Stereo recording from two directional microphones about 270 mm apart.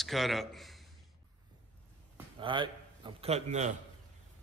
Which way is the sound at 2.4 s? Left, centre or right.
Centre.